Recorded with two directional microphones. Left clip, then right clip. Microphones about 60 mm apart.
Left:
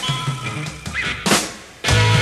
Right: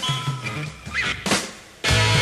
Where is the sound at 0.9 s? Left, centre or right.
Right.